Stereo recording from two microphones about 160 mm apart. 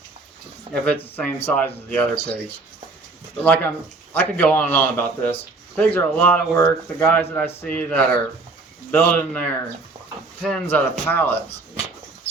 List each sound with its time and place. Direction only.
0.7 s speech: 10° left (ahead or behind)
3.4 s speech: 10° left (ahead or behind)